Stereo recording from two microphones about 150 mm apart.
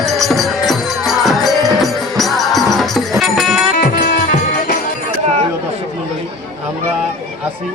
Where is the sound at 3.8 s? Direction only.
65° left (ahead or behind).